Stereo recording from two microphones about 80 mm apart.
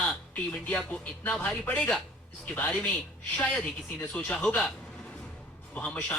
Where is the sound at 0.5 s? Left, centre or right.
Centre.